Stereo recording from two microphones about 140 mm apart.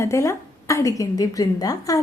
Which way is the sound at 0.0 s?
20° left (ahead or behind).